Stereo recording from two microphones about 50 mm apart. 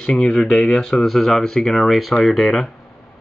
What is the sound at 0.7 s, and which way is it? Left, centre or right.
Speech, centre.